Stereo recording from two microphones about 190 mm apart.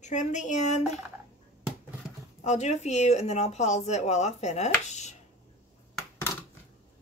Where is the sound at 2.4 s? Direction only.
35° left (ahead or behind).